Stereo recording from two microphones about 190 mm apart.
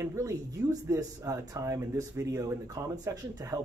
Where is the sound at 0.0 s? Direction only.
15° right (ahead or behind).